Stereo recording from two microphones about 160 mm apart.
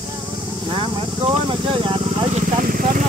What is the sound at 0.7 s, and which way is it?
Vehicle, 30° right (ahead or behind).